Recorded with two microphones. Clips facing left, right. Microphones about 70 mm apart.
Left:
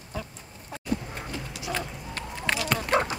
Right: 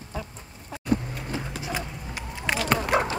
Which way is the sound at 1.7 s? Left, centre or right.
Centre.